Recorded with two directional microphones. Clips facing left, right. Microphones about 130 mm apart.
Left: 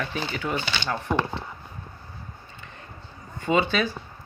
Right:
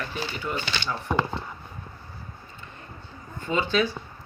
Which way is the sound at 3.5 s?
65° left (ahead or behind).